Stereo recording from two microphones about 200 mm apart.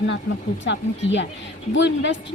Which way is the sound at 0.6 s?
65° left (ahead or behind).